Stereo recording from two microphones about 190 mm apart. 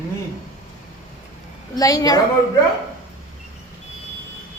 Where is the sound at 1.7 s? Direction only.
20° left (ahead or behind).